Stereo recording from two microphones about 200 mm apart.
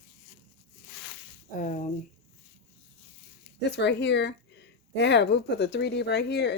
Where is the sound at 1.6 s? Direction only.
40° left (ahead or behind).